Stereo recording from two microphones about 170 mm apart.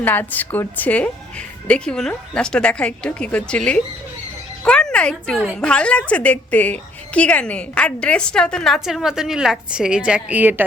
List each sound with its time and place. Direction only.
0.0 s a woman's voice: 10° left (ahead or behind)
4.6 s a sound: 5° left (ahead or behind)
5.5 s a woman's voice: 5° left (ahead or behind)